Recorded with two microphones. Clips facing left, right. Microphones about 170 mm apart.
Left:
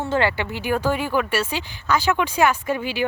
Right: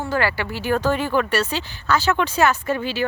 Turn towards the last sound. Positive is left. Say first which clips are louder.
# right 1 dB
turn(degrees=15)  # may be behind; listen again after turning